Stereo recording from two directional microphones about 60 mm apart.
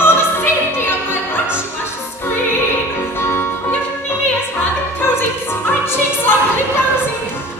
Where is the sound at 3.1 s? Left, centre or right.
Left.